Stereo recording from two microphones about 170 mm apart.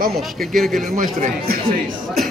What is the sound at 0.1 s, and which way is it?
Speech, centre (ahead or behind).